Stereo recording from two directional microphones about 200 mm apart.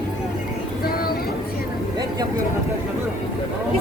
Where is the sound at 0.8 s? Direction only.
50° left (ahead or behind).